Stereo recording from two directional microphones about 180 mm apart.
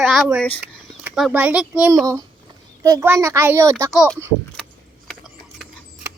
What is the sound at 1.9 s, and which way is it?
A child's voice, 20° right (ahead or behind).